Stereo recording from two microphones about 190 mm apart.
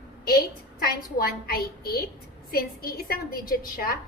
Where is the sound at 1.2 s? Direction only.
55° left (ahead or behind).